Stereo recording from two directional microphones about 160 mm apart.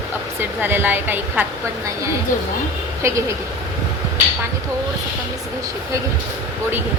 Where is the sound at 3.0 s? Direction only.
20° right (ahead or behind).